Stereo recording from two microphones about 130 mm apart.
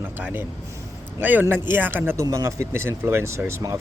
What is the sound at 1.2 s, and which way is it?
Speech, 15° right (ahead or behind).